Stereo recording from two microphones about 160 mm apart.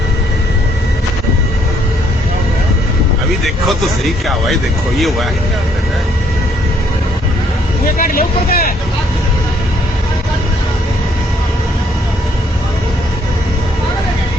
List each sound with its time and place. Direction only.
4.0 s speech: centre (ahead or behind)
7.9 s speech: 60° left (ahead or behind)